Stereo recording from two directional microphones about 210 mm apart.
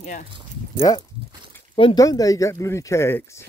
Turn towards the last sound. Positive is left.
turn(degrees=10)  # may be behind; listen again after turning